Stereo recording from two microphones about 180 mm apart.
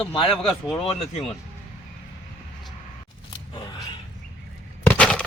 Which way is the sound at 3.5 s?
25° left (ahead or behind).